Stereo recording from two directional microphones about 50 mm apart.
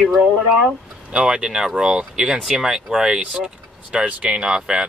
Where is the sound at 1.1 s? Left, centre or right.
Centre.